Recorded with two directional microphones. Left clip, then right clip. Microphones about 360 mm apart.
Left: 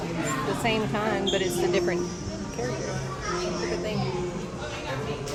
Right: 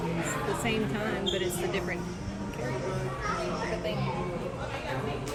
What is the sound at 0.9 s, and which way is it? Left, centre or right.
Speech, left.